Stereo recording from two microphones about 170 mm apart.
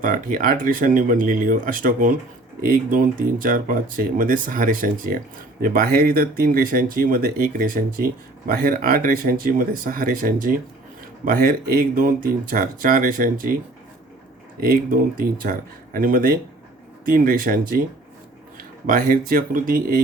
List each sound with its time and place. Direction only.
0.0 s speech: 55° right (ahead or behind)
14.6 s speech: 55° right (ahead or behind)
18.9 s speech: 55° right (ahead or behind)